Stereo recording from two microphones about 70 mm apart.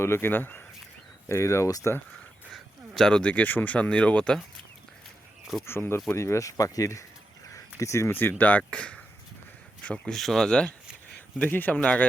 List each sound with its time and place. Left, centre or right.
0.0 s speech: left
1.3 s speech: left
2.5 s speech: centre
5.6 s speech: left
6.1 s speech: left; by 10.2 s centre
10.2 s speech: centre
11.3 s speech: left